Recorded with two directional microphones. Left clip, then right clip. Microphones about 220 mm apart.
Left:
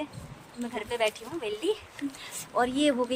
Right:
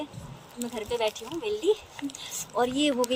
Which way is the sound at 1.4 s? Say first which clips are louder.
Right 4 dB; 10° left (ahead or behind).